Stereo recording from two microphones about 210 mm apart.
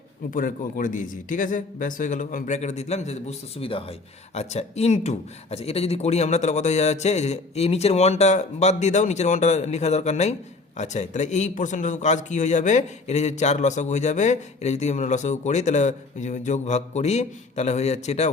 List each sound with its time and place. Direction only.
0.3 s a man's voice: 40° left (ahead or behind)